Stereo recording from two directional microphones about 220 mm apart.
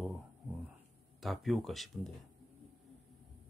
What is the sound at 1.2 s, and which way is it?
Speech, centre (ahead or behind).